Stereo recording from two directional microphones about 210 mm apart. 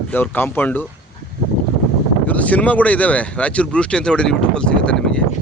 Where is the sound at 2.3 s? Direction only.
5° left (ahead or behind).